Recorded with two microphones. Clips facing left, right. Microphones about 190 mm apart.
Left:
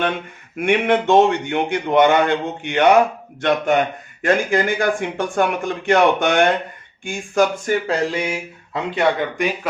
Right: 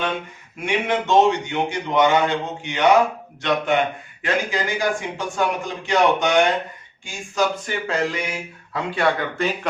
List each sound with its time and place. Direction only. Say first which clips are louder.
0.6 s speech: left 5 dB; 55° left (ahead or behind)
4.2 s speech: left 6 dB; 55° left (ahead or behind)
7.9 s speech: left 3 dB; 25° left (ahead or behind)